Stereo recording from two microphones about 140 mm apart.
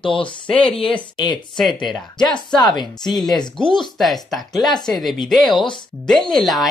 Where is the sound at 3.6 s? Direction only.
35° left (ahead or behind).